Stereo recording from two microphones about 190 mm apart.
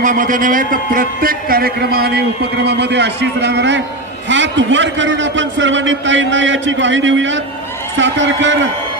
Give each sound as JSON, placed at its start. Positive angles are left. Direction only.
{"t": 0.0, "sound": "a man's voice", "side_deg": -45}